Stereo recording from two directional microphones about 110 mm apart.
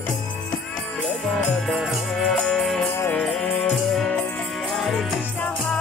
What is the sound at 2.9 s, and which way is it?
Music, 25° left (ahead or behind).